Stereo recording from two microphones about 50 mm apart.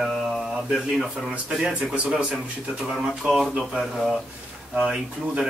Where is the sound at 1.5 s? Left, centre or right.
Centre.